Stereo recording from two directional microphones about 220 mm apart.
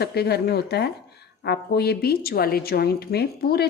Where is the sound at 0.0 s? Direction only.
45° left (ahead or behind).